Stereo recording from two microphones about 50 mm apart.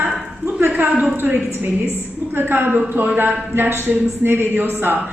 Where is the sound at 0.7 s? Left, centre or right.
Right.